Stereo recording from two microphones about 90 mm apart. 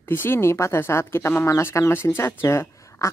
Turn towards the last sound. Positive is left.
turn(degrees=35)  # may be behind; listen again after turning